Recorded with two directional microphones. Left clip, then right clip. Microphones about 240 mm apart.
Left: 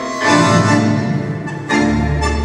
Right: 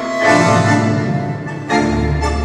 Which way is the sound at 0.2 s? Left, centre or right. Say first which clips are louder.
Right 1 dB; left.